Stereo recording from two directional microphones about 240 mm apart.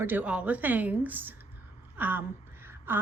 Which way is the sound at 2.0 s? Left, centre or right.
Centre.